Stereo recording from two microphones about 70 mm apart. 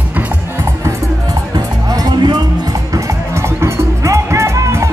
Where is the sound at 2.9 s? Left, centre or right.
Right.